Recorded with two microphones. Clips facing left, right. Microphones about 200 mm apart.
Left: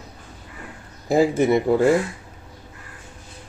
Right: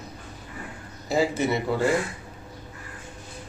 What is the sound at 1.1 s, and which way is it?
Speech, 50° left (ahead or behind).